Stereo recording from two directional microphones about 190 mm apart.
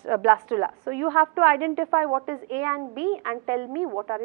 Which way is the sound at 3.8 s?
25° right (ahead or behind).